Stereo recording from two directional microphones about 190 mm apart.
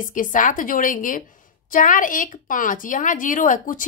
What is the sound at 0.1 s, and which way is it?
A woman's voice, 45° left (ahead or behind).